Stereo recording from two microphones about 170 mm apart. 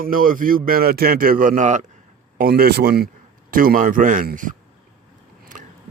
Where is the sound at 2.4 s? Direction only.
65° right (ahead or behind).